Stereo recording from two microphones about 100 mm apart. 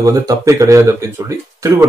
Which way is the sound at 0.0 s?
35° right (ahead or behind).